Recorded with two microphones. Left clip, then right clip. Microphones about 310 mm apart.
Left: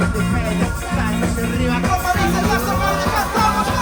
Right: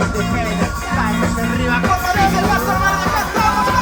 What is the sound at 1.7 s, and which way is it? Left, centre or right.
Music, right.